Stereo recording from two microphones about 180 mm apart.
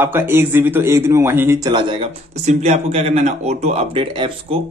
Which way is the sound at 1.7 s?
25° right (ahead or behind).